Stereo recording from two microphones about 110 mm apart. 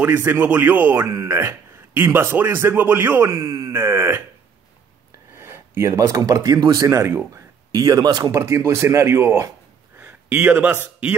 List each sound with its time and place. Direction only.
0.0 s a man's voice: 15° right (ahead or behind)
5.3 s speech: 20° right (ahead or behind); by 8.3 s 40° right (ahead or behind)
8.3 s a man's voice: 25° right (ahead or behind)